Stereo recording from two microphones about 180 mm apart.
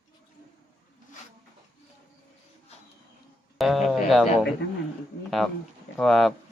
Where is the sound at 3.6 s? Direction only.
Centre (ahead or behind).